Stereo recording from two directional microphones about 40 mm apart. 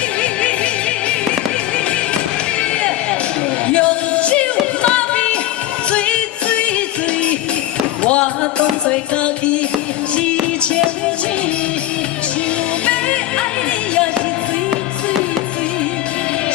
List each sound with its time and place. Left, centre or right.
0.2 s music: left
3.7 s music: left
8.0 s music: left